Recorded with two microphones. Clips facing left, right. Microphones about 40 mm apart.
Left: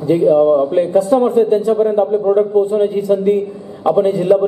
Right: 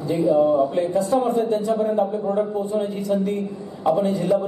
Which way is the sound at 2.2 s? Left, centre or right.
Left.